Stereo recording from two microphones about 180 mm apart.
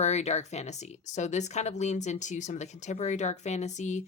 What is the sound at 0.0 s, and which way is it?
Speech, 40° left (ahead or behind).